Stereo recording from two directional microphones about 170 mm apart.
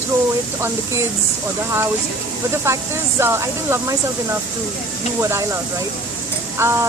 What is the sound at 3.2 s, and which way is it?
Speech, 15° right (ahead or behind).